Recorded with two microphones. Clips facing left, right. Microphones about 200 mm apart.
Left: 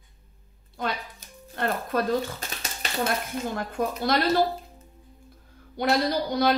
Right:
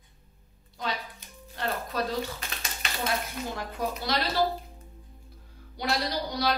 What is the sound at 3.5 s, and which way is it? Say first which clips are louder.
Speech: left 3 dB; 50° left (ahead or behind).